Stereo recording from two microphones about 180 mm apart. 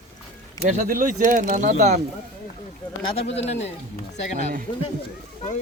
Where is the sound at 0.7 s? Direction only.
45° right (ahead or behind).